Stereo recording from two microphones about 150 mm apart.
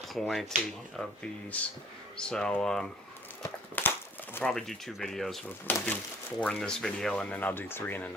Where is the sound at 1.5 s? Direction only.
10° left (ahead or behind).